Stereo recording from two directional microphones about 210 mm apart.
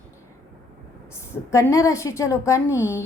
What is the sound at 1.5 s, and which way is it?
A woman's voice, 15° left (ahead or behind).